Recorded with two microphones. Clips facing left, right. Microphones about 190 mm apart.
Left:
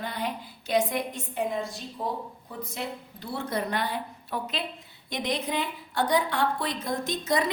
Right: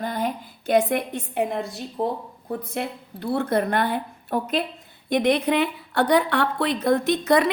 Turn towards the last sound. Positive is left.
turn(degrees=-65)  # may be behind; listen again after turning